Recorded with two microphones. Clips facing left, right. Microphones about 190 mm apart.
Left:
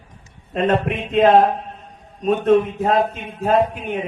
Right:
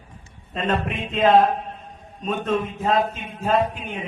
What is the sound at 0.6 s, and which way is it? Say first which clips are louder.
Speech: left 5 dB; 60° left (ahead or behind).